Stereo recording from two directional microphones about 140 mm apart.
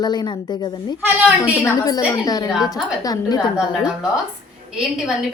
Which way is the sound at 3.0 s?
25° left (ahead or behind).